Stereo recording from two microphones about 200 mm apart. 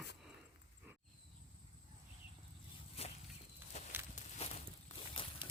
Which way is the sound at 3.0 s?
30° left (ahead or behind).